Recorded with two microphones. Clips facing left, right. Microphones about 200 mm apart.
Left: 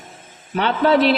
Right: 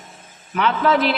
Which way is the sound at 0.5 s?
30° left (ahead or behind).